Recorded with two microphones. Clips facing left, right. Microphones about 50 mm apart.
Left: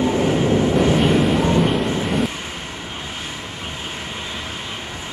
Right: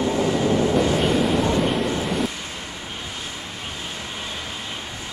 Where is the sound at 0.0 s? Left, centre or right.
Left.